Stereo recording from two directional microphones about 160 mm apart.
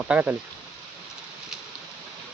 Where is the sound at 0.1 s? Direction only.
10° right (ahead or behind).